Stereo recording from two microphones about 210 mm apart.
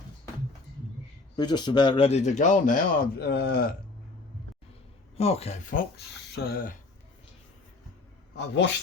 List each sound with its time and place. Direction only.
1.4 s speech: 20° left (ahead or behind); by 3.8 s 45° left (ahead or behind)
5.1 s speech: 30° left (ahead or behind)
6.3 s speech: 45° left (ahead or behind)
8.4 s speech: 55° left (ahead or behind)